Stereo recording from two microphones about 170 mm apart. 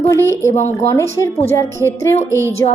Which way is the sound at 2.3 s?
15° right (ahead or behind).